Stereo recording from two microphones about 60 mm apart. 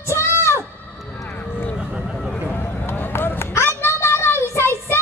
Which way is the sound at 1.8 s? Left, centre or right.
Centre.